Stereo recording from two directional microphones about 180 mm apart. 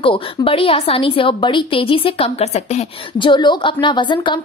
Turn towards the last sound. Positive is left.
turn(degrees=25)  # may be behind; listen again after turning